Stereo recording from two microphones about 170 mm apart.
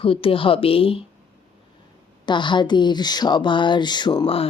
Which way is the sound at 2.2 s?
25° left (ahead or behind).